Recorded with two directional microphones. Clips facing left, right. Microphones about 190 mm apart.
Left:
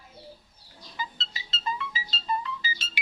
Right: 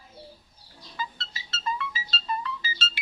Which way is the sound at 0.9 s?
15° left (ahead or behind).